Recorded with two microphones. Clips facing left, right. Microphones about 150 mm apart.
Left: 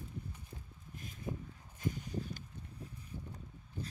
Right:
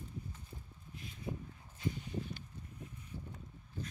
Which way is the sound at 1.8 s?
45° left (ahead or behind).